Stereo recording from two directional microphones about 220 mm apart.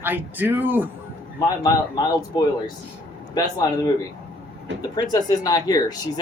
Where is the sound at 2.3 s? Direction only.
20° left (ahead or behind).